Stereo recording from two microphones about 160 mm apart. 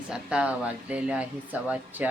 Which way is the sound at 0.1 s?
5° right (ahead or behind).